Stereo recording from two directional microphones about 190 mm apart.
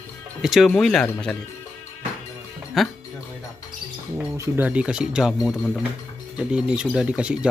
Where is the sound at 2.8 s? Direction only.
Centre (ahead or behind).